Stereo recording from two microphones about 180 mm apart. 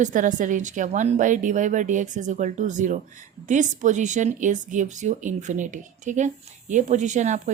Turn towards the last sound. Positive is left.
turn(degrees=-40)  # may be behind; listen again after turning